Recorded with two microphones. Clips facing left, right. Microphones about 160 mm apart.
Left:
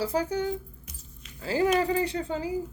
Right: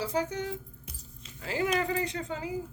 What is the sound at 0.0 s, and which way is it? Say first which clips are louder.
Speech: left 4 dB; 35° left (ahead or behind).